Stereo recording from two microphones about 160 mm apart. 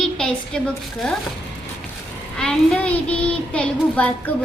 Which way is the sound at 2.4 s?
5° left (ahead or behind).